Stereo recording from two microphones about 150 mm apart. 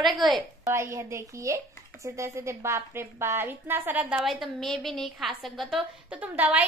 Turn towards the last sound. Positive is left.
turn(degrees=-10)  # may be behind; listen again after turning